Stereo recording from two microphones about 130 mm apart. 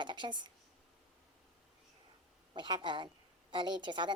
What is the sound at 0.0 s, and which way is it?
Speech, 35° right (ahead or behind).